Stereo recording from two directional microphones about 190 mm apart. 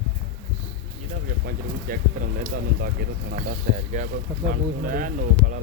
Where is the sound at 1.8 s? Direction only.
45° right (ahead or behind).